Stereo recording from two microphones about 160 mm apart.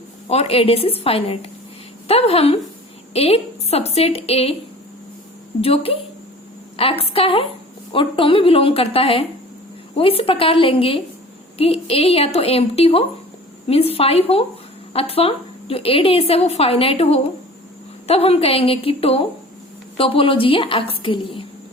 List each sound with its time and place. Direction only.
0.3 s a woman's voice: 40° left (ahead or behind)
5.5 s a woman's voice: 35° left (ahead or behind)